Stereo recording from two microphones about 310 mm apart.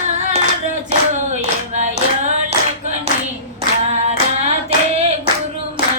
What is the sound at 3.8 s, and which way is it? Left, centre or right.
Female singing, right.